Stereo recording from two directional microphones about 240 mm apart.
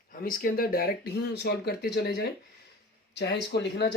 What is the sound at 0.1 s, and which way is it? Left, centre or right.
Speech, left.